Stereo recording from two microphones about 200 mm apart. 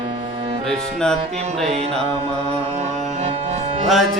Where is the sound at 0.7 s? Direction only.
5° left (ahead or behind).